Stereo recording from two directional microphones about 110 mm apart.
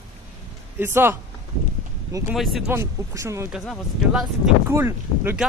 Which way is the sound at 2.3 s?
Centre (ahead or behind).